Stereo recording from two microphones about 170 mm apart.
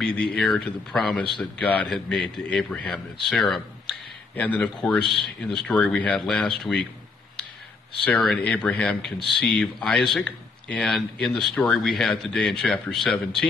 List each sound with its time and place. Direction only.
0.0 s a man's voice: 5° left (ahead or behind)
8.0 s a man's voice: 5° left (ahead or behind)